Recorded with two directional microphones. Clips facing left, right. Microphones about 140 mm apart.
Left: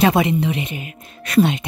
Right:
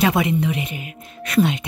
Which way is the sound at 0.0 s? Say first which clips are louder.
Left 2 dB; 30° left (ahead or behind).